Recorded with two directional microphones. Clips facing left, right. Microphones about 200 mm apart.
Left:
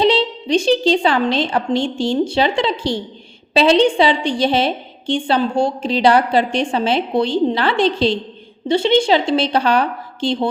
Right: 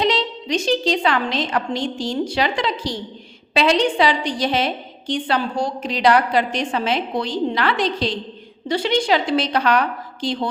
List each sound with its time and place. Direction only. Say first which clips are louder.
0.0 s a woman's voice: left 5 dB; 30° left (ahead or behind)